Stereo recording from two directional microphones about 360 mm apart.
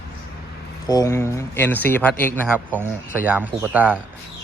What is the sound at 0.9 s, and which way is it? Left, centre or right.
Speech, centre.